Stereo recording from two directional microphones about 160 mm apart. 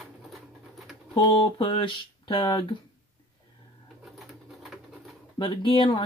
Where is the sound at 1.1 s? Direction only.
30° left (ahead or behind).